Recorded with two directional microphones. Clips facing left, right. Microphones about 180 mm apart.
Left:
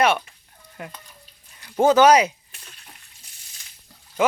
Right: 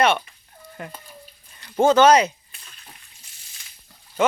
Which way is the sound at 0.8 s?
5° left (ahead or behind).